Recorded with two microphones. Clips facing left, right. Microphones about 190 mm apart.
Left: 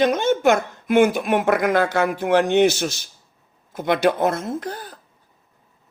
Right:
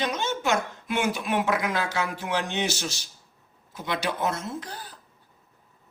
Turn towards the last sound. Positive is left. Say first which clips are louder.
# left 7 dB
turn(degrees=50)  # may be behind; listen again after turning